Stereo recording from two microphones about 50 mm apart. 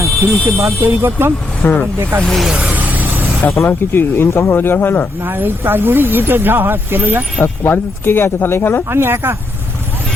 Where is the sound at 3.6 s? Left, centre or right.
Left.